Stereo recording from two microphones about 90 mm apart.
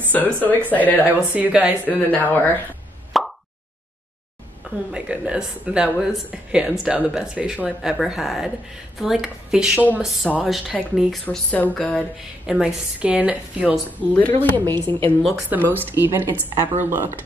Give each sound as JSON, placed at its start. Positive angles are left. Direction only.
{"t": 0.1, "sound": "speech", "side_deg": 20}
{"t": 1.0, "sound": "speech", "side_deg": -20}
{"t": 1.9, "sound": "speech", "side_deg": 20}
{"t": 3.1, "sound": "plop", "side_deg": 0}
{"t": 4.9, "sound": "speech", "side_deg": -10}
{"t": 9.8, "sound": "speech", "side_deg": -20}
{"t": 10.4, "sound": "speech", "side_deg": -5}
{"t": 11.2, "sound": "a sound", "side_deg": 20}
{"t": 12.4, "sound": "speech", "side_deg": -10}
{"t": 14.1, "sound": "speech", "side_deg": 20}
{"t": 15.7, "sound": "speech", "side_deg": -20}